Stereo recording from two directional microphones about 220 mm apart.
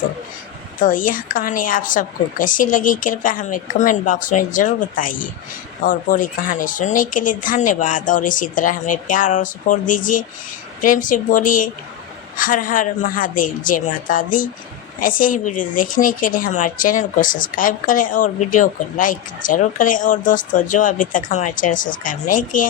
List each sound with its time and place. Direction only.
0.8 s speech: 40° left (ahead or behind)